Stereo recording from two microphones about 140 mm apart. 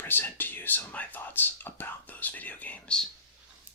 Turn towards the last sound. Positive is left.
turn(degrees=10)  # may be behind; listen again after turning